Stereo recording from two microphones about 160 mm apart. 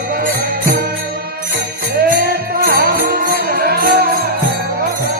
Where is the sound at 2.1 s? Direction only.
75° right (ahead or behind).